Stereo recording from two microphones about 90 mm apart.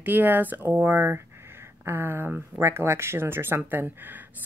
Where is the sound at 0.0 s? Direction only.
20° right (ahead or behind).